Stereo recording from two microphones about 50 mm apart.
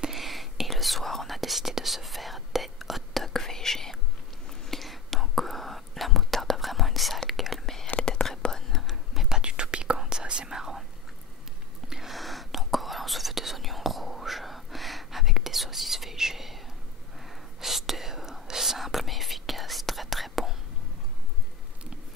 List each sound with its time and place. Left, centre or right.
0.1 s whispering: centre
7.8 s whispering: centre
8.8 s whispering: centre
9.4 s whispering: centre
11.9 s whispering: centre